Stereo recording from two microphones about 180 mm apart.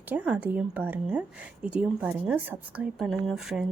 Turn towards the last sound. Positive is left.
turn(degrees=0)  # may be behind; listen again after turning